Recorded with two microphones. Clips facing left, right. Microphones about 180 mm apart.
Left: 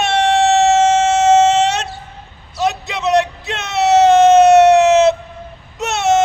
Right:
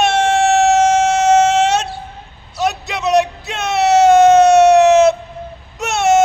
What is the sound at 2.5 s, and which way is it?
Bellow, centre (ahead or behind).